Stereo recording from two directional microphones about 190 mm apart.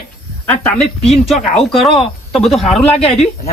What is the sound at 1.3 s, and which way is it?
Speech, 30° left (ahead or behind).